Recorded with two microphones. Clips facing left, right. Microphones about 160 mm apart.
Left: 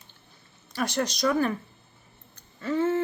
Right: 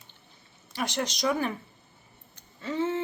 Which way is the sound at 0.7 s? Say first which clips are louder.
Left 3 dB; 20° right (ahead or behind).